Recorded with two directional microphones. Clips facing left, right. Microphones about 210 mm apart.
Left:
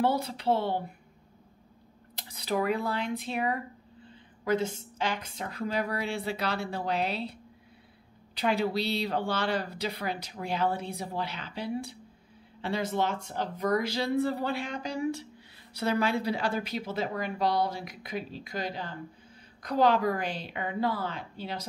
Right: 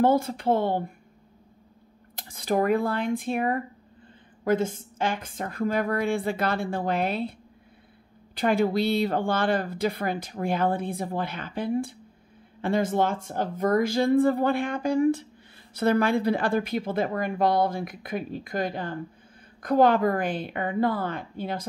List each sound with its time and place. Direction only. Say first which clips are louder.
0.0 s speech: right 6 dB; 50° right (ahead or behind)
2.1 s speech: right 5 dB; 50° right (ahead or behind)
8.4 s speech: right 5 dB; 50° right (ahead or behind)